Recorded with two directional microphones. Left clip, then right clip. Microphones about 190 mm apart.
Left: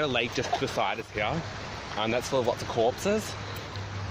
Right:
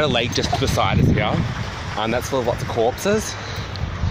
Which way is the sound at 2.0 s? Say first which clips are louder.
Right 6 dB; 30° right (ahead or behind).